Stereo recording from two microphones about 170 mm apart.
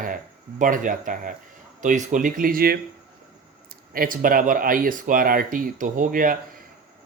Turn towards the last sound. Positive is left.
turn(degrees=-55)  # may be behind; listen again after turning